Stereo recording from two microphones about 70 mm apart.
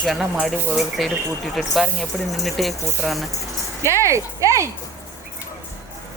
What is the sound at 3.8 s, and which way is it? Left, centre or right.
Speech, right.